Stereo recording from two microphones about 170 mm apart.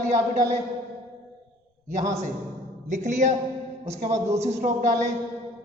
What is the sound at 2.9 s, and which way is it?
A man's voice, 45° right (ahead or behind).